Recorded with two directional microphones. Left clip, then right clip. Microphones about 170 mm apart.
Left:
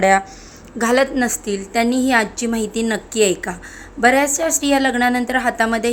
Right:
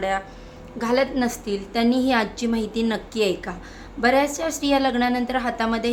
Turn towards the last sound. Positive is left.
turn(degrees=15)  # may be behind; listen again after turning